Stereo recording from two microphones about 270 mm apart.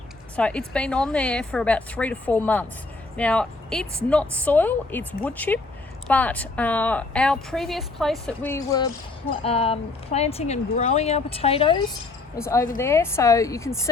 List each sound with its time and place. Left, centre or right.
0.3 s a woman's voice: centre